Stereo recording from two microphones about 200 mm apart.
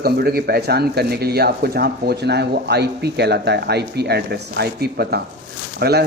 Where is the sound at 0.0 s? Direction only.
50° right (ahead or behind).